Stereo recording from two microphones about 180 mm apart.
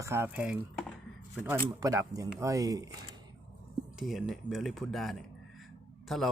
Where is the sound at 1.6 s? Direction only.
20° right (ahead or behind).